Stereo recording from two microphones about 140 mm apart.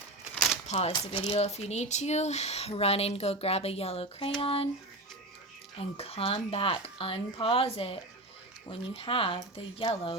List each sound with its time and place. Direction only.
0.7 s speech: 50° left (ahead or behind)
5.8 s speech: 45° left (ahead or behind)